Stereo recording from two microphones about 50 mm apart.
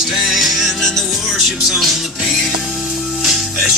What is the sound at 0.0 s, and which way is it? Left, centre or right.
Music, centre.